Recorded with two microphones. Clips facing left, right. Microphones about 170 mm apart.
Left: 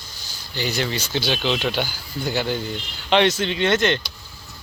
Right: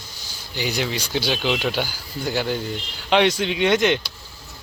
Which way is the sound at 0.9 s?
10° right (ahead or behind).